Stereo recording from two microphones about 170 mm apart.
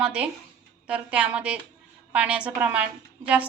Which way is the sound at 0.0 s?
5° right (ahead or behind).